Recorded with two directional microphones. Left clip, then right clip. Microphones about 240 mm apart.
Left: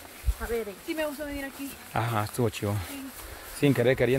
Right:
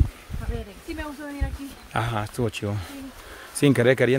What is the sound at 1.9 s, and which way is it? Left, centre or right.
Speech, centre.